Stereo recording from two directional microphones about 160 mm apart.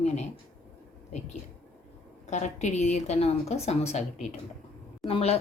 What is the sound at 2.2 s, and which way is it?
A woman's voice, 45° left (ahead or behind).